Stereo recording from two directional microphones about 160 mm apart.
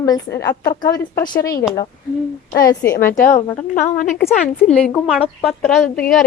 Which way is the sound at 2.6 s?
20° left (ahead or behind).